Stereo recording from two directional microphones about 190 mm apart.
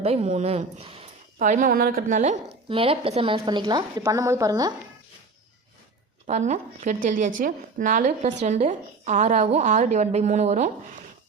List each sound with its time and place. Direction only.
0.0 s a woman's voice: 35° right (ahead or behind)
1.5 s a woman's voice: 45° right (ahead or behind)
2.6 s a woman's voice: 30° right (ahead or behind)
6.2 s speech: 35° right (ahead or behind)